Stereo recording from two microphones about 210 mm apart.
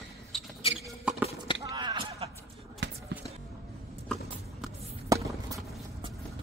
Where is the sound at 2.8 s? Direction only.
55° right (ahead or behind).